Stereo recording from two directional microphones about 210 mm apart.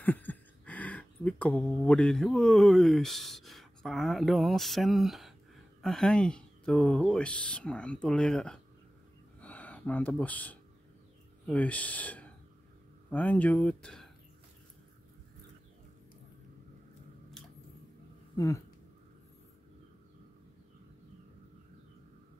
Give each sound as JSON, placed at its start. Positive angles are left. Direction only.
{"t": 0.0, "sound": "speech", "side_deg": 10}
{"t": 9.4, "sound": "a sound", "side_deg": 5}
{"t": 11.4, "sound": "speech", "side_deg": 5}
{"t": 18.3, "sound": "speech", "side_deg": 15}